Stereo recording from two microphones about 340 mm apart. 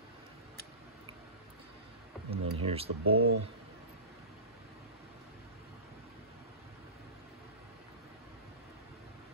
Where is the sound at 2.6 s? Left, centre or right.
Centre.